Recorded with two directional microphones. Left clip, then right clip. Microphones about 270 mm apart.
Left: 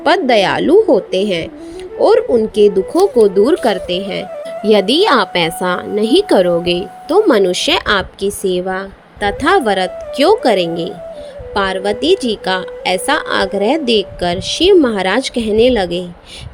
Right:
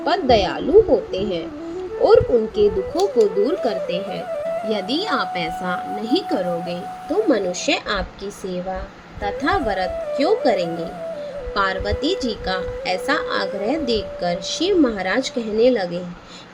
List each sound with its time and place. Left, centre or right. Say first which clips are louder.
0.0 s a woman's voice: left 6 dB; left